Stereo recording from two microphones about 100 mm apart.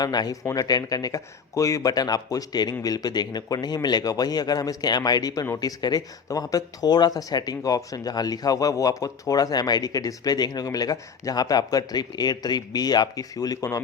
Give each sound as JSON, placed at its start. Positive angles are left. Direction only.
{"t": 0.0, "sound": "speech", "side_deg": 40}